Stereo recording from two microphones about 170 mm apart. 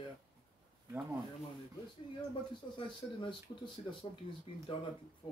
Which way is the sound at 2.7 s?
30° left (ahead or behind).